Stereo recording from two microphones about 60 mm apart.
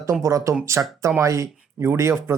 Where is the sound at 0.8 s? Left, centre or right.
Right.